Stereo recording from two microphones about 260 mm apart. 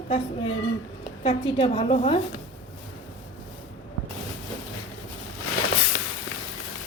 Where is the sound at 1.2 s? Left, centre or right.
Left.